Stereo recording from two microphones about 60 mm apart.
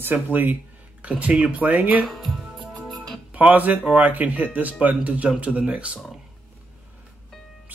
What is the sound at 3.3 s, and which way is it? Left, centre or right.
Speech, right.